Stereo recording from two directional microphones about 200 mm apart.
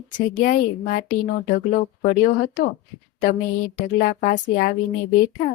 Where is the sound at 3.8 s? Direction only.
40° left (ahead or behind).